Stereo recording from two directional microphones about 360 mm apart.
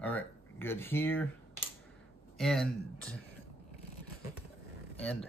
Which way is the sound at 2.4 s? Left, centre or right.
Centre.